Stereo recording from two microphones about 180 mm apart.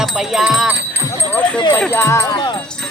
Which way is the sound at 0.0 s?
5° right (ahead or behind).